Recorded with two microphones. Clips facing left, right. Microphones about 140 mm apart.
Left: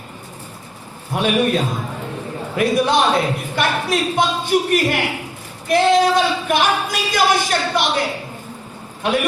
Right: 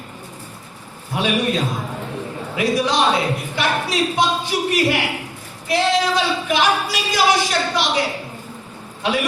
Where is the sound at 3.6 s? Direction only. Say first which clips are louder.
Left 1 dB; 55° left (ahead or behind).